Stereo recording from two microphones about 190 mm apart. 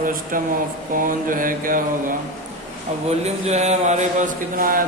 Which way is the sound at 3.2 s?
35° right (ahead or behind).